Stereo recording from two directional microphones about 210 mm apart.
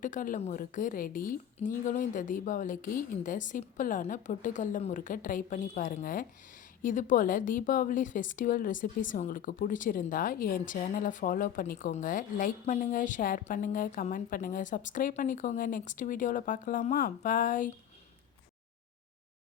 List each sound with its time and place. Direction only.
0.0 s a woman's voice: 40° left (ahead or behind)